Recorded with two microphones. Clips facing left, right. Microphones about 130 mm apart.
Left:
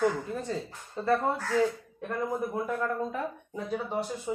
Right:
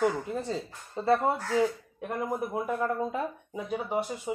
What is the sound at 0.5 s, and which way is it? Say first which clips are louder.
Speech: even; 20° right (ahead or behind).